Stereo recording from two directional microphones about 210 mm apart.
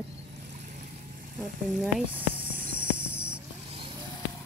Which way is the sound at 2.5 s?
40° right (ahead or behind).